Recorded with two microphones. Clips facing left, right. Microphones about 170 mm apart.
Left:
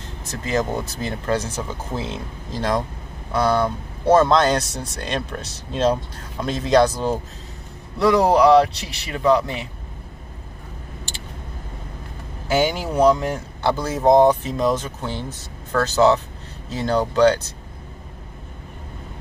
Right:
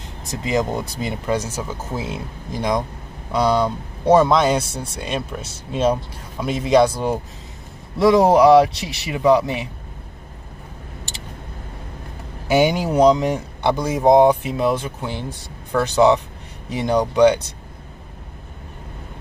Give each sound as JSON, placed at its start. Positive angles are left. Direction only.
{"t": 0.3, "sound": "speech", "side_deg": -15}
{"t": 12.4, "sound": "speech", "side_deg": -20}